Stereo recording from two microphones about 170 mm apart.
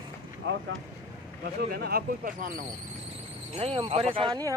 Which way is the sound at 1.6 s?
65° right (ahead or behind).